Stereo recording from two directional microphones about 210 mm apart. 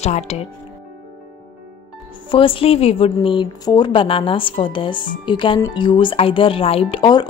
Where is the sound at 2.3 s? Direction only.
25° left (ahead or behind).